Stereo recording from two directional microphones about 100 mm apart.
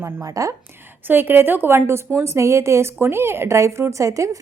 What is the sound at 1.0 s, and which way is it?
A woman's voice, 20° right (ahead or behind).